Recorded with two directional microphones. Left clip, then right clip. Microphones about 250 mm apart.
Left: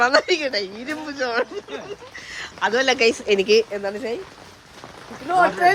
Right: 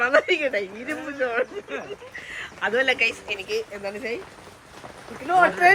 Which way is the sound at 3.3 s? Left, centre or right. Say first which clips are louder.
Left 11 dB; left.